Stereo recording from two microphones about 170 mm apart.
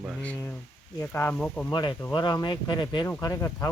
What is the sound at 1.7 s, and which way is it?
Speech, 25° left (ahead or behind).